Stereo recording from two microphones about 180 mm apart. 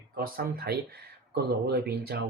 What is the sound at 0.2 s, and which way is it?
Speech, 55° right (ahead or behind).